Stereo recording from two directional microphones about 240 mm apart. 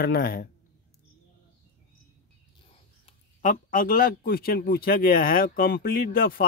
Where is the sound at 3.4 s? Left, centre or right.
Left.